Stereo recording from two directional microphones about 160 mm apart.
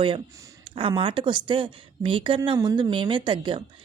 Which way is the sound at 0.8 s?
35° right (ahead or behind).